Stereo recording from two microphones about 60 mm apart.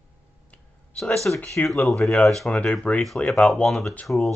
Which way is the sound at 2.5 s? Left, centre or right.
Centre.